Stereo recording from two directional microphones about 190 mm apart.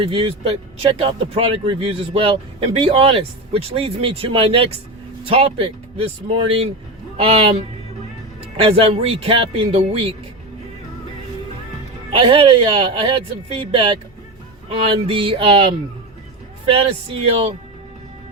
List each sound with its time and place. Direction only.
0.0 s a man's voice: 30° right (ahead or behind)
8.5 s speech: 30° right (ahead or behind)
12.1 s speech: 30° right (ahead or behind)